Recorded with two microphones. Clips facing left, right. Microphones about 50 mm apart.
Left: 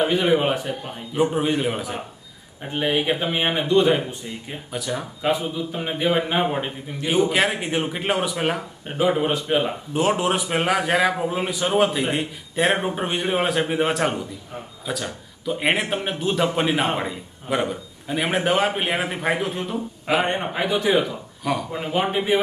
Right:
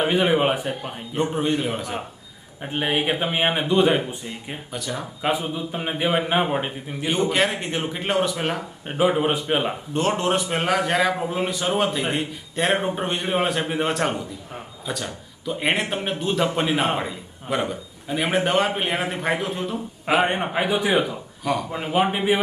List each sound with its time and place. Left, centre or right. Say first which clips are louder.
0.0 s a man's voice: even; centre
1.1 s a man's voice: left 2 dB; centre
2.7 s a man's voice: left 1 dB; centre
4.7 s a man's voice: left 3 dB; centre
5.2 s a man's voice: left 1 dB; centre
7.1 s a man's voice: left 2 dB; centre
8.9 s a man's voice: even; centre
9.9 s a man's voice: left 1 dB; centre
20.1 s a man's voice: right 2 dB; centre
21.4 s a man's voice: even; centre